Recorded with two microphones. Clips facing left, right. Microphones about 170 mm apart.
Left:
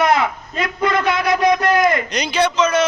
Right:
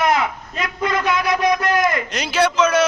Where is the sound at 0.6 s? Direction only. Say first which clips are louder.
Left 2 dB; 35° left (ahead or behind).